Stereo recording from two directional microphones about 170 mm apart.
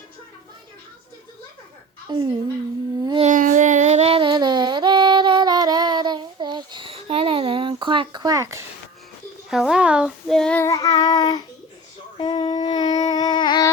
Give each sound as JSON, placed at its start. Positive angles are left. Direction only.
{"t": 2.1, "sound": "speech", "side_deg": -25}
{"t": 3.0, "sound": "a sound", "side_deg": -25}
{"t": 3.2, "sound": "music", "side_deg": -50}
{"t": 9.5, "sound": "child singing", "side_deg": 0}
{"t": 10.6, "sound": "child singing", "side_deg": 20}
{"t": 12.1, "sound": "a sound", "side_deg": 25}